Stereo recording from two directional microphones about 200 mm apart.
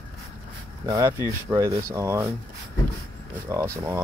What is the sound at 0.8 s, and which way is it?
Speech, 15° right (ahead or behind).